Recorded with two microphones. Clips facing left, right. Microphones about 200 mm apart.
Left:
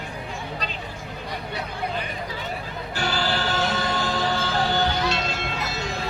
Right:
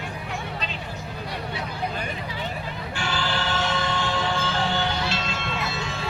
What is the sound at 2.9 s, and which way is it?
Train, 40° left (ahead or behind).